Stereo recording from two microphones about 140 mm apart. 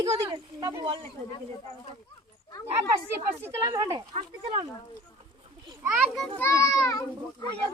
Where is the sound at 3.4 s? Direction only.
25° right (ahead or behind).